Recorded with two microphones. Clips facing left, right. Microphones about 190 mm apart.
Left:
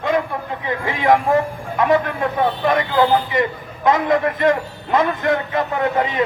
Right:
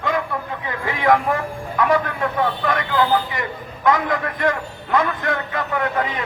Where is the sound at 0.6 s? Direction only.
20° left (ahead or behind).